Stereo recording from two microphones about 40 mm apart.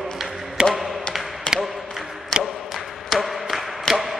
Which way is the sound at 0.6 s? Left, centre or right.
Right.